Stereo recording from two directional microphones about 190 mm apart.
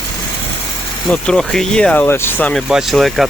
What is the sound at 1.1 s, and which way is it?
Speech, 5° left (ahead or behind).